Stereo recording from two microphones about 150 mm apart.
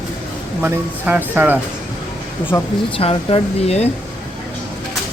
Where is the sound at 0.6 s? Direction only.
10° right (ahead or behind).